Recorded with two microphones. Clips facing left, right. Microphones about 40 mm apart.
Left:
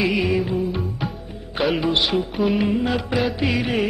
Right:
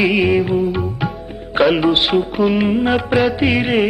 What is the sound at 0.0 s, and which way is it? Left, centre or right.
Music, right.